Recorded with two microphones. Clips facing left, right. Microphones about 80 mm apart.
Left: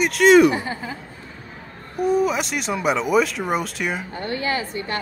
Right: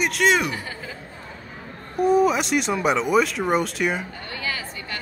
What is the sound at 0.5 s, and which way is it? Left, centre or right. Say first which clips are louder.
Speech: left 6 dB; left.